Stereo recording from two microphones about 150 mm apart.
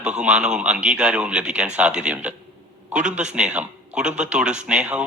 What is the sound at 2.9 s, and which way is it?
Speech, 55° right (ahead or behind).